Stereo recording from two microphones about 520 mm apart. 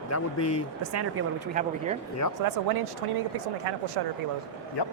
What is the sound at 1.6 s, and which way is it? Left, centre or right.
Speech, centre.